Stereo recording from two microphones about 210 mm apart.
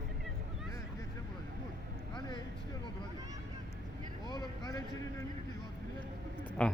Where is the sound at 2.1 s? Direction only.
20° left (ahead or behind).